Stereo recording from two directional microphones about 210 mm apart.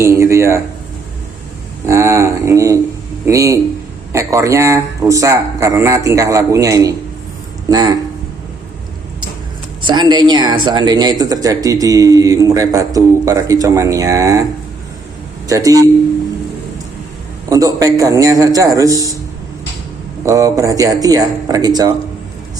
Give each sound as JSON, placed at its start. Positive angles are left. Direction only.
{"t": 0.0, "sound": "speech", "side_deg": -15}
{"t": 1.9, "sound": "speech", "side_deg": -15}
{"t": 9.8, "sound": "speech", "side_deg": -20}
{"t": 15.4, "sound": "speech", "side_deg": -15}
{"t": 17.5, "sound": "speech", "side_deg": -15}
{"t": 20.2, "sound": "speech", "side_deg": -15}